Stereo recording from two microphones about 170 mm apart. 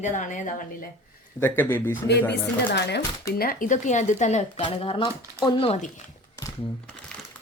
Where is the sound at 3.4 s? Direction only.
55° left (ahead or behind).